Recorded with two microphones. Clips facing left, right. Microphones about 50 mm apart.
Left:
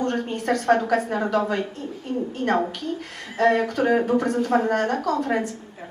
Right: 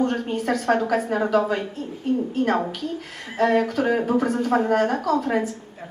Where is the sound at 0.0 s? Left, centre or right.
Centre.